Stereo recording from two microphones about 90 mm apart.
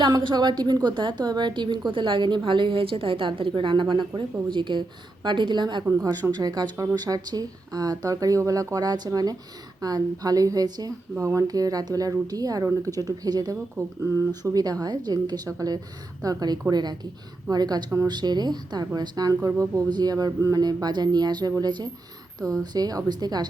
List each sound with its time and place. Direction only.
0.2 s a woman's voice: 55° right (ahead or behind)
13.7 s a woman's voice: 35° right (ahead or behind); by 23.5 s 50° right (ahead or behind)